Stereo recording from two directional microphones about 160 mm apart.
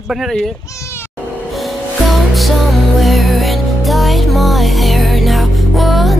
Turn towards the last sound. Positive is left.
turn(degrees=0)  # may be behind; listen again after turning